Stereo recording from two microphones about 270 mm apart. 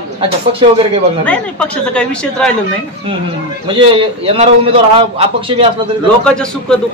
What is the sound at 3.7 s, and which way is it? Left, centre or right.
A man's voice, centre.